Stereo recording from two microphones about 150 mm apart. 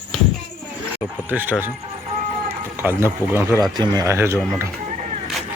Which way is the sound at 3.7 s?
25° right (ahead or behind).